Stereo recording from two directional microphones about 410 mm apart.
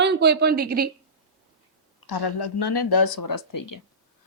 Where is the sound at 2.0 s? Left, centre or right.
Left.